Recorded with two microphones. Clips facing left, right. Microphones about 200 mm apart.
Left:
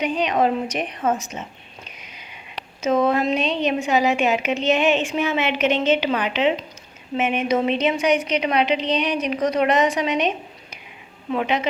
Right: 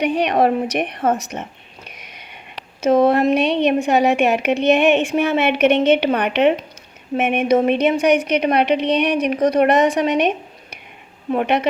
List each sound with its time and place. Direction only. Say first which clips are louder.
0.0 s a woman's voice: right 4 dB; 65° right (ahead or behind)
2.8 s a woman's voice: right 5 dB; 55° right (ahead or behind)